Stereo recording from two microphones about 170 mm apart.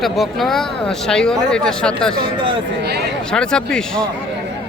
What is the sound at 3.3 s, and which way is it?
Speech, 5° left (ahead or behind).